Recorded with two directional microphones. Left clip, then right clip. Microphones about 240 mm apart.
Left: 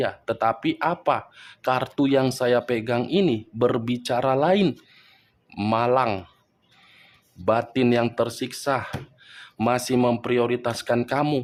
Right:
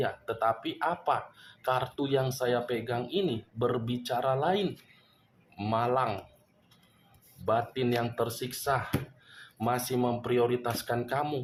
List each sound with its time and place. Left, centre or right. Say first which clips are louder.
0.0 s speech: left 6 dB; left
7.4 s speech: left 7 dB; left